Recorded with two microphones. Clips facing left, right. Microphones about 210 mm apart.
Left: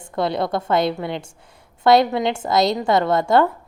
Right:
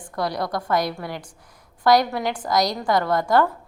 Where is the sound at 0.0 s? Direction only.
25° left (ahead or behind).